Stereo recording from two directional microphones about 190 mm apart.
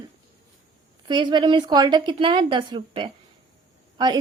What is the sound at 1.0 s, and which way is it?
Speech, 25° right (ahead or behind).